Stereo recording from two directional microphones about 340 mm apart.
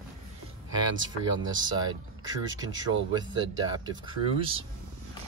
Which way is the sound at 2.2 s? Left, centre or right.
Centre.